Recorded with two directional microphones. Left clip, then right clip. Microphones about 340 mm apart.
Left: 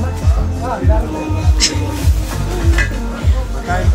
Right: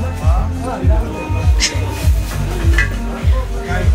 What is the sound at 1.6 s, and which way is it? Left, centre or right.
Speech, centre.